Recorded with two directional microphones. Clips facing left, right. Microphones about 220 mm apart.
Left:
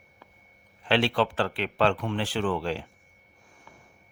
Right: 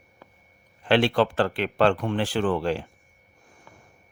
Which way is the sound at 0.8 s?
50° right (ahead or behind).